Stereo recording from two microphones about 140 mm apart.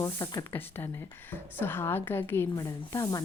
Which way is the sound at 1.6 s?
15° left (ahead or behind).